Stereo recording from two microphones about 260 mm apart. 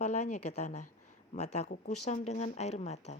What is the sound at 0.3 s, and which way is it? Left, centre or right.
Speech, left.